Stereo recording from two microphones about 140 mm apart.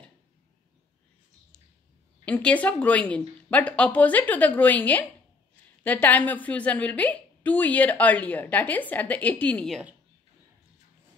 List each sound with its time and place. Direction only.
2.2 s a woman's voice: 10° left (ahead or behind)